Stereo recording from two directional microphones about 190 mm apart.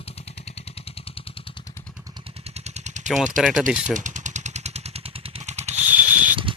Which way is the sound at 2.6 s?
35° right (ahead or behind).